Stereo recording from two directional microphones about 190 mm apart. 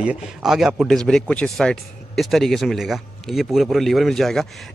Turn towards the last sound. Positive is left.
turn(degrees=0)  # may be behind; listen again after turning